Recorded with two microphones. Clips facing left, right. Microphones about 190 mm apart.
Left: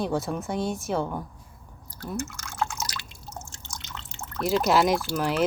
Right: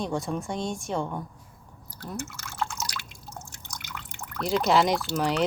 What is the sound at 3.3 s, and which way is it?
Drip, 25° left (ahead or behind).